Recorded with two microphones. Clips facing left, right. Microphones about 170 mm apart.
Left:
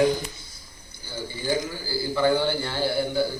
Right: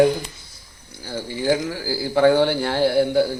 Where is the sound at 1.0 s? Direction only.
90° right.